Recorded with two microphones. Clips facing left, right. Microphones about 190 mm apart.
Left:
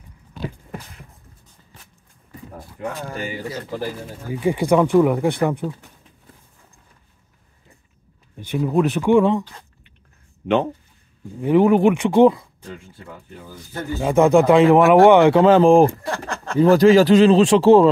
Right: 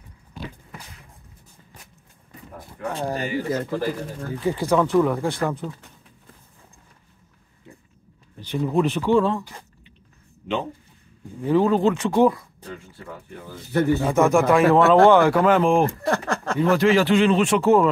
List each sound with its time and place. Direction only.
2.9 s speech: 35° right (ahead or behind)
4.3 s speech: 15° left (ahead or behind)
8.5 s speech: 5° left (ahead or behind)
11.4 s speech: 20° left (ahead or behind)
13.7 s speech: 65° right (ahead or behind)
14.0 s speech: 20° left (ahead or behind); by 15.9 s 35° left (ahead or behind)
16.1 s a sound: 45° right (ahead or behind)
16.5 s speech: 35° left (ahead or behind)